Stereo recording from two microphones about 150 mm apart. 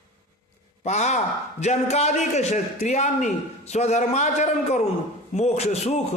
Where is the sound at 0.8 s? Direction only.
50° left (ahead or behind).